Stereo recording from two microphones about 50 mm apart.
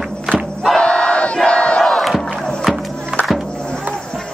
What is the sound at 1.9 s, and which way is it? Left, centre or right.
Crowd, centre.